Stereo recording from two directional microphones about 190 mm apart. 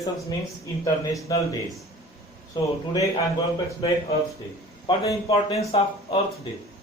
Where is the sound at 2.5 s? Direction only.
25° left (ahead or behind).